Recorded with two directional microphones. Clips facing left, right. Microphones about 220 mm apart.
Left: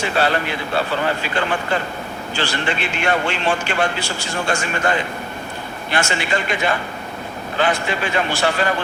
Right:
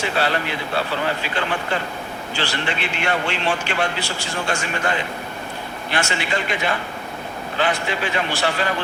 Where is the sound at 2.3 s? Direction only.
45° left (ahead or behind).